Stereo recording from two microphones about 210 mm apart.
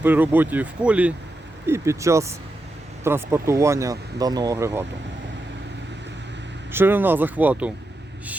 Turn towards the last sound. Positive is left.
turn(degrees=-10)  # may be behind; listen again after turning